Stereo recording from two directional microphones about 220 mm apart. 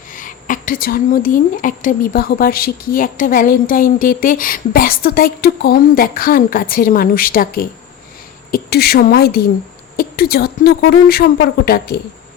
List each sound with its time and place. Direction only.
0.1 s a woman's voice: 35° left (ahead or behind)